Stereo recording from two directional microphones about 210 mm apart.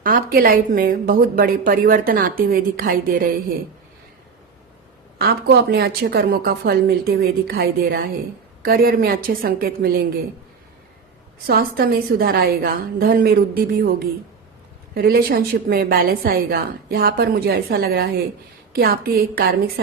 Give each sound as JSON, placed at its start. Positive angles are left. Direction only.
{"t": 0.0, "sound": "a woman's voice", "side_deg": -40}
{"t": 5.1, "sound": "a woman's voice", "side_deg": -50}
{"t": 11.4, "sound": "a woman's voice", "side_deg": -45}